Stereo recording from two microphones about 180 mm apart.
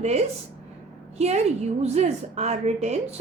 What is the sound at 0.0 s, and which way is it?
A woman's voice, 35° right (ahead or behind).